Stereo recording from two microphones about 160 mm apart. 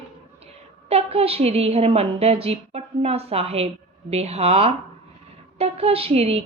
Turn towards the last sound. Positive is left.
turn(degrees=-40)  # may be behind; listen again after turning